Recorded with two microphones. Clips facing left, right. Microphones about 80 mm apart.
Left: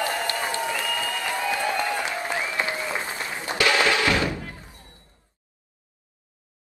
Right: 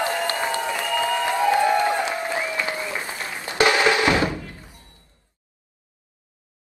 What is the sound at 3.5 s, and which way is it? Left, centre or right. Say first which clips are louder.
Music: right 3 dB; right.